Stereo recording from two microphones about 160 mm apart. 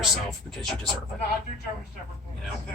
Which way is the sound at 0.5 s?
Centre (ahead or behind).